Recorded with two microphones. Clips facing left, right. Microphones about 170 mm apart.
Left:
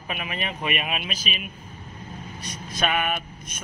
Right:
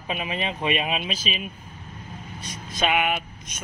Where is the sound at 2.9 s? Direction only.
15° right (ahead or behind).